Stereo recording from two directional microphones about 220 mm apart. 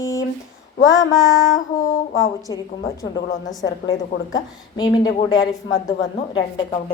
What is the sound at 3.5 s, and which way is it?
A woman's voice, 15° left (ahead or behind).